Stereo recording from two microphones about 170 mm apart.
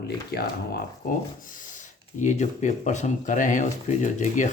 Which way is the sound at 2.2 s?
45° left (ahead or behind).